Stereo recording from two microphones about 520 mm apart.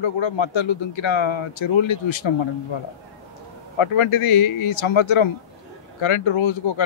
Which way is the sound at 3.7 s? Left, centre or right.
Left.